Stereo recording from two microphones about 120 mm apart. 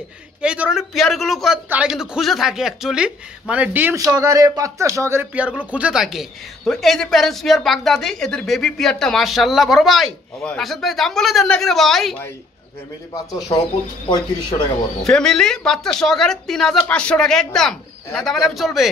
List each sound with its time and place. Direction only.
0.4 s speech: 5° right (ahead or behind)
3.9 s speech: 30° right (ahead or behind); by 12.2 s centre (ahead or behind)
13.1 s speech: 30° left (ahead or behind)
14.0 s speech: 40° left (ahead or behind)
15.0 s speech: 5° left (ahead or behind)